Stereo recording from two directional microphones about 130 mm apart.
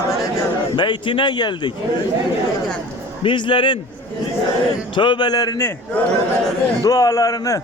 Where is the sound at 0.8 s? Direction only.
40° left (ahead or behind).